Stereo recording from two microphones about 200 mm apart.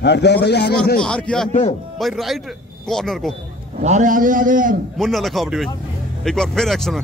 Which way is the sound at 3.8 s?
40° right (ahead or behind).